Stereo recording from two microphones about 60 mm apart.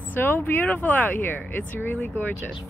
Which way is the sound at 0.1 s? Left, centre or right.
Left.